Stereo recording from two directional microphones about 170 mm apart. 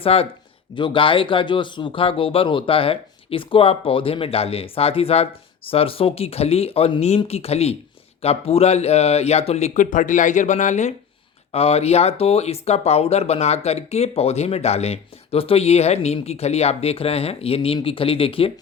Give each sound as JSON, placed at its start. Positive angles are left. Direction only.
{"t": 0.0, "sound": "speech", "side_deg": 35}